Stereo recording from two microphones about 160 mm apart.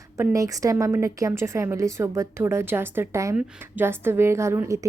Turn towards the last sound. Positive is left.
turn(degrees=-20)  # may be behind; listen again after turning